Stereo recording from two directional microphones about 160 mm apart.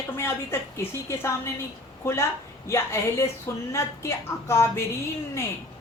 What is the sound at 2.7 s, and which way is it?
A woman's voice, 15° left (ahead or behind).